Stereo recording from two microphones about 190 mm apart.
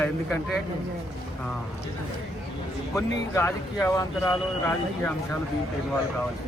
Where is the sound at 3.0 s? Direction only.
15° left (ahead or behind).